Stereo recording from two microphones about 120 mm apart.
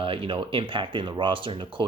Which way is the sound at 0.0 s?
50° right (ahead or behind).